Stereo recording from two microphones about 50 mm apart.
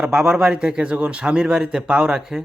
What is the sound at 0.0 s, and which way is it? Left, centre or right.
A man's voice, centre.